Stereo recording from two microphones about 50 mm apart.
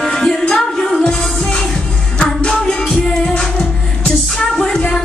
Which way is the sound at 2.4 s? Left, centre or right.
Centre.